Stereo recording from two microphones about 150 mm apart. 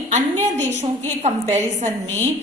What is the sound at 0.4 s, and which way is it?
A woman's voice, 55° right (ahead or behind).